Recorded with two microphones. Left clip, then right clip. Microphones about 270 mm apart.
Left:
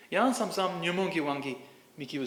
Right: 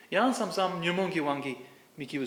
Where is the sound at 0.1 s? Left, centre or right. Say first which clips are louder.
Even; centre.